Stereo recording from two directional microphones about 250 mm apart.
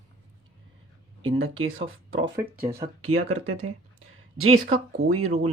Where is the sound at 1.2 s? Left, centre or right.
Right.